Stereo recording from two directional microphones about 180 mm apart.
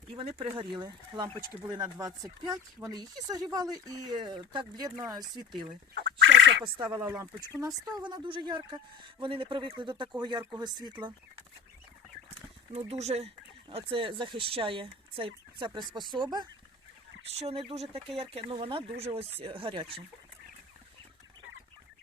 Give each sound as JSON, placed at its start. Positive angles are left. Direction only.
{"t": 0.2, "sound": "speech", "side_deg": -30}
{"t": 5.9, "sound": "duck", "side_deg": -80}
{"t": 6.7, "sound": "speech", "side_deg": -25}
{"t": 12.3, "sound": "speech", "side_deg": -35}